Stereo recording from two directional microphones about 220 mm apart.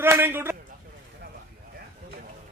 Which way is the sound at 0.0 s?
10° right (ahead or behind).